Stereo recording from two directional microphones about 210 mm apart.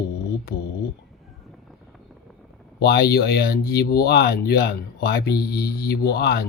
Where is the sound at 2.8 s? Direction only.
50° left (ahead or behind).